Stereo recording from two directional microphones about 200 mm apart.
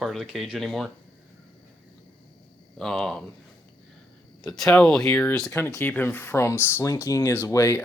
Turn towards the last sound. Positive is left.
turn(degrees=15)  # may be behind; listen again after turning